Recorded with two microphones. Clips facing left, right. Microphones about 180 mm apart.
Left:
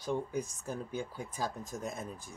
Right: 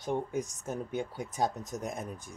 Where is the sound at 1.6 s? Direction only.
20° right (ahead or behind).